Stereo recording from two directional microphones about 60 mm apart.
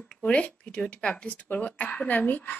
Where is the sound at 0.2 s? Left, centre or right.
Centre.